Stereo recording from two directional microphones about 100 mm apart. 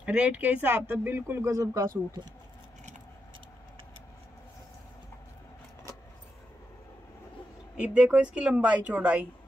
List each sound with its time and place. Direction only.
0.0 s speech: 10° right (ahead or behind); by 1.9 s 30° right (ahead or behind)
7.7 s speech: 10° right (ahead or behind)